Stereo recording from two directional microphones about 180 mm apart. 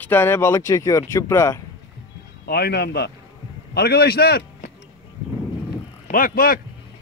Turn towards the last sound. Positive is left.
turn(degrees=55)  # may be behind; listen again after turning